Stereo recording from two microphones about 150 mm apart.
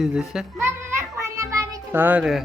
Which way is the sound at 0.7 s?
15° right (ahead or behind).